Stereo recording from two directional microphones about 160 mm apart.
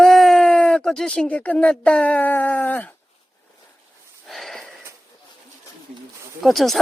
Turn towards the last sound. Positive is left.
turn(degrees=0)  # may be behind; listen again after turning